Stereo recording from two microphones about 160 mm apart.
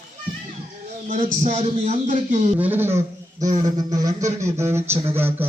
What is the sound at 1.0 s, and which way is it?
A man's voice, 45° right (ahead or behind).